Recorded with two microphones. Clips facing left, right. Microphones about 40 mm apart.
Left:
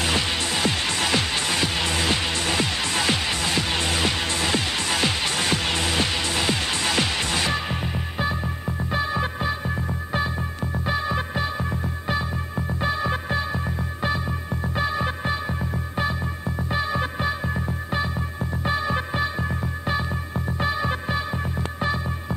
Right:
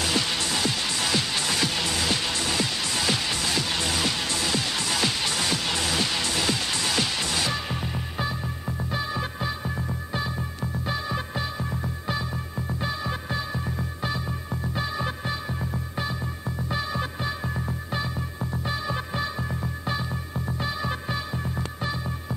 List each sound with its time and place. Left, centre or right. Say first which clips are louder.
0.0 s music: left 2 dB; left
16.5 s music: left 4 dB; left
18.6 s music: left 6 dB; left